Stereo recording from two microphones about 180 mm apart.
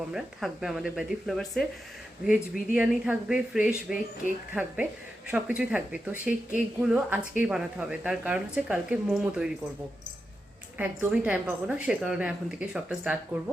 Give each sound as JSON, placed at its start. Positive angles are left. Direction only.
{"t": 0.1, "sound": "speech", "side_deg": 0}
{"t": 10.8, "sound": "speech", "side_deg": -10}